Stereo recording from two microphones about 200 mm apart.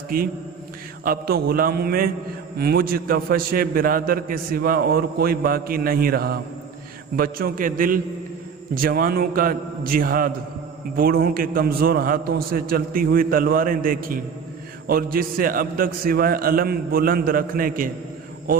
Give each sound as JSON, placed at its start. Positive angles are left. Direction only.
{"t": 0.1, "sound": "a man's voice", "side_deg": -45}